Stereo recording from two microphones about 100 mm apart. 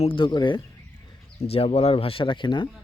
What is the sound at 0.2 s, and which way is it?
Speech, 50° left (ahead or behind).